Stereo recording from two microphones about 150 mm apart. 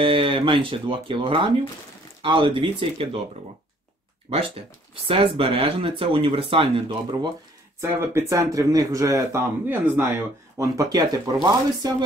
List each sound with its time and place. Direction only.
0.0 s speech: 35° right (ahead or behind)
4.3 s speech: 40° right (ahead or behind)
7.8 s speech: 15° right (ahead or behind)